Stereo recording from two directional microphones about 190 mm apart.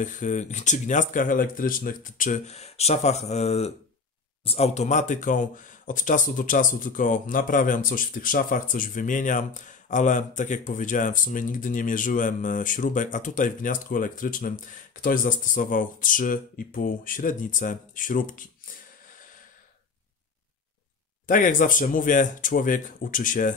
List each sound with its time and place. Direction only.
0.0 s speech: 40° left (ahead or behind)
21.3 s speech: 45° left (ahead or behind)